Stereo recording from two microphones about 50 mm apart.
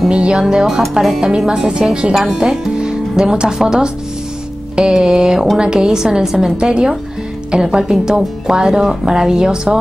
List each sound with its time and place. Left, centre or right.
0.1 s a woman's voice: centre
1.2 s a woman's voice: centre